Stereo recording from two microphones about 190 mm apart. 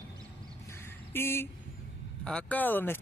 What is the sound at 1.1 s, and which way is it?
Speech, 10° left (ahead or behind).